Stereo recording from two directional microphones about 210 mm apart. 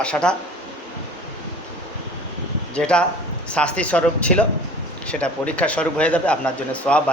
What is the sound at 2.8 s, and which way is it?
Speech, 5° left (ahead or behind).